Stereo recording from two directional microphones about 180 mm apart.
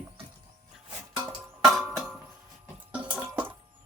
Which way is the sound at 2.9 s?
5° right (ahead or behind).